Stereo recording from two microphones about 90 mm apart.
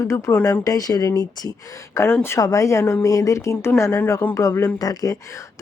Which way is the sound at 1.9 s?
25° left (ahead or behind).